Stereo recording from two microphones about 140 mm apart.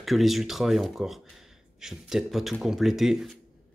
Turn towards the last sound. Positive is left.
turn(degrees=0)  # may be behind; listen again after turning